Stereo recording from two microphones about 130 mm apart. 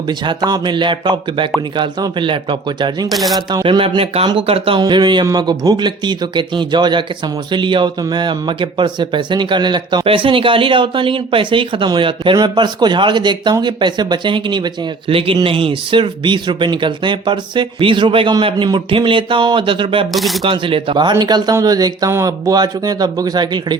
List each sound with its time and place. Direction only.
0.1 s speech: 35° right (ahead or behind)
3.1 s speech: centre (ahead or behind)
3.3 s speech: 35° right (ahead or behind)
20.1 s speech: centre (ahead or behind)
20.4 s speech: 40° right (ahead or behind)